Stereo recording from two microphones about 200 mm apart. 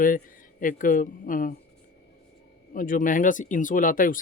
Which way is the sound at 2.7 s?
45° left (ahead or behind).